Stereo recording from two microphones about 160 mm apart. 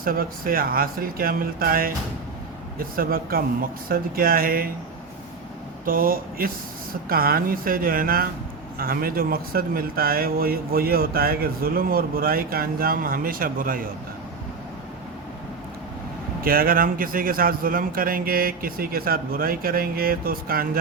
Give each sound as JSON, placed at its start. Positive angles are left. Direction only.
{"t": 0.0, "sound": "a man's voice", "side_deg": -65}
{"t": 5.8, "sound": "a man's voice", "side_deg": -65}
{"t": 16.4, "sound": "a man's voice", "side_deg": -65}